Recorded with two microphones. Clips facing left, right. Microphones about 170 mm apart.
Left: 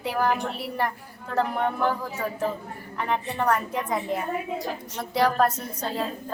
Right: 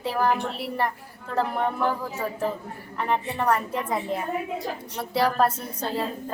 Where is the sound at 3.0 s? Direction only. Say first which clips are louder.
Right 1 dB; centre (ahead or behind).